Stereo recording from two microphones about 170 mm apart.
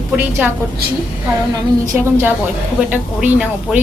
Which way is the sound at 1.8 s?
15° right (ahead or behind).